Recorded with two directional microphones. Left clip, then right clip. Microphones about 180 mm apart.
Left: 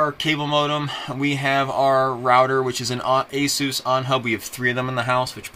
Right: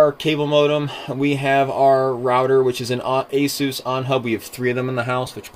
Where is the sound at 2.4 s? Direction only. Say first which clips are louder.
Right 3 dB; 20° left (ahead or behind).